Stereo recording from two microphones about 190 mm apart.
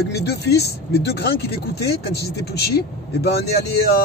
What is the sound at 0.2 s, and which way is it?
Speech, 60° left (ahead or behind).